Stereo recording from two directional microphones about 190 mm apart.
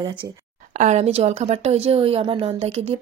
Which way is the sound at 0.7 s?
35° right (ahead or behind).